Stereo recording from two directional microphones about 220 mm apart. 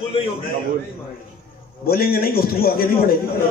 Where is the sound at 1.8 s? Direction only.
45° left (ahead or behind).